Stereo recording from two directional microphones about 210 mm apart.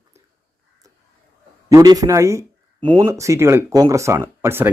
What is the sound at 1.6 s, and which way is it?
A man's voice, 15° right (ahead or behind).